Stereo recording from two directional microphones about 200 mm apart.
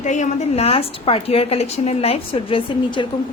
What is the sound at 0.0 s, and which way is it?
A woman's voice, 35° left (ahead or behind).